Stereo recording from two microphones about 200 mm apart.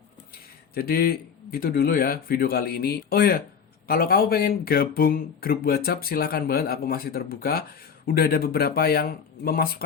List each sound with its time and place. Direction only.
0.7 s speech: 50° left (ahead or behind)